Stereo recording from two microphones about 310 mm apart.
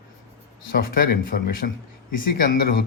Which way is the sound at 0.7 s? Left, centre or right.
Left.